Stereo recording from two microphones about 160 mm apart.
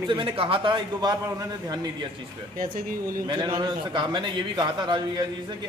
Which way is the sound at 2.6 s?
60° right (ahead or behind).